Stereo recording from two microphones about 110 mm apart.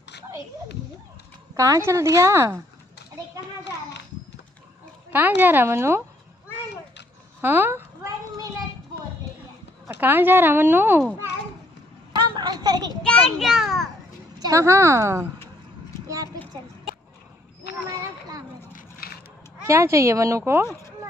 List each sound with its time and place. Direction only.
1.6 s speech: 30° right (ahead or behind)
5.1 s speech: 15° right (ahead or behind)
7.4 s speech: 20° right (ahead or behind)
9.9 s speech: 15° right (ahead or behind)
12.1 s a sound: 40° right (ahead or behind)
13.0 s a child's voice: 5° left (ahead or behind)
14.4 s speech: 30° right (ahead or behind)
19.6 s speech: 25° right (ahead or behind)